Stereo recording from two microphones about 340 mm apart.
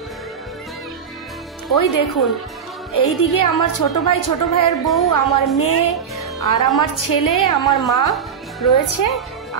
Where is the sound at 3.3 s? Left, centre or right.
Left.